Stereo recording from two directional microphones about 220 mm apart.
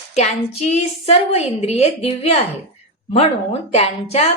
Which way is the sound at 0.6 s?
30° left (ahead or behind).